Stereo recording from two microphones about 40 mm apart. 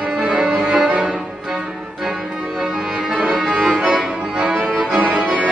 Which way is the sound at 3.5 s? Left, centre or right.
Right.